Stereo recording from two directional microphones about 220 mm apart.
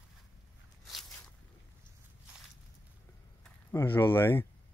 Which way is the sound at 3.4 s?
10° left (ahead or behind).